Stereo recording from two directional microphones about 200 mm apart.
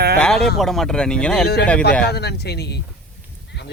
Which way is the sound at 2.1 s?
55° left (ahead or behind).